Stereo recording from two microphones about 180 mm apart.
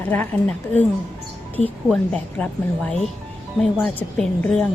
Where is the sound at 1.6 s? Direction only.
40° left (ahead or behind).